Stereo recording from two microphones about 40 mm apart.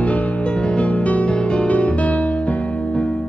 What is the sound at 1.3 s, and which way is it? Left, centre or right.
Music, left.